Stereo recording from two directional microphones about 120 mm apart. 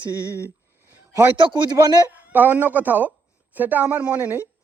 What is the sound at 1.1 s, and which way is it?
Speech, 20° right (ahead or behind).